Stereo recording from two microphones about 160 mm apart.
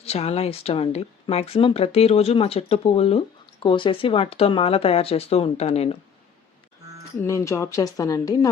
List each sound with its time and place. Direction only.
0.0 s speech: 40° left (ahead or behind)
7.3 s speech: 20° left (ahead or behind)